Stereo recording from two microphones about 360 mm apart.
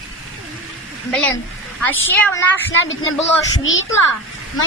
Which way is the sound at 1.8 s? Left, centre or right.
Centre.